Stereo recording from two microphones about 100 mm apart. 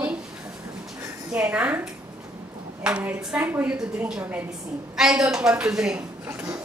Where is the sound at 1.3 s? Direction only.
15° right (ahead or behind).